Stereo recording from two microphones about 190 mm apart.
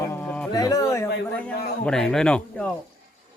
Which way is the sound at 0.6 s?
20° left (ahead or behind).